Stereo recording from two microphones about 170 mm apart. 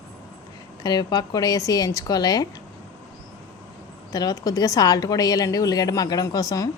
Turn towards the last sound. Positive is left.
turn(degrees=20)  # may be behind; listen again after turning